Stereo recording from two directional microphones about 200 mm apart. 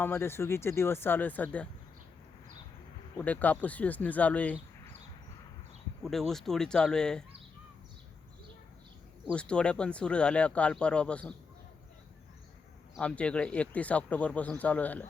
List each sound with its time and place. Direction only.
0.0 s speech: 10° left (ahead or behind)
3.2 s speech: 10° left (ahead or behind)
6.0 s speech: centre (ahead or behind)
9.3 s speech: 5° left (ahead or behind)
13.0 s speech: 5° left (ahead or behind)